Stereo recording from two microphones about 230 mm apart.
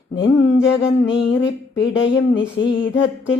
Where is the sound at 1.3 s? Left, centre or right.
Left.